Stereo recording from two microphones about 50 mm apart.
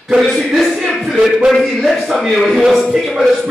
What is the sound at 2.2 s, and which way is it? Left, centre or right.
Speech, centre.